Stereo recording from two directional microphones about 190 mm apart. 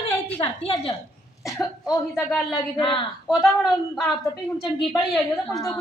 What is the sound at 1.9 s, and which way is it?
Speech, 10° left (ahead or behind).